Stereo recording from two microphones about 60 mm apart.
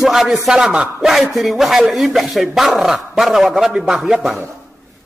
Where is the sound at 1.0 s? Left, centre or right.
Centre.